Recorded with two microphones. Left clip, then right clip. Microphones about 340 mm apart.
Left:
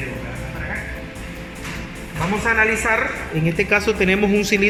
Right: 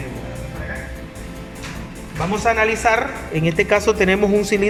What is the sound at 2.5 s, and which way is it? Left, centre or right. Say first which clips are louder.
Speech: left 1 dB; right.